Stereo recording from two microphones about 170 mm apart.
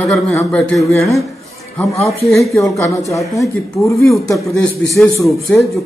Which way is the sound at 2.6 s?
20° left (ahead or behind).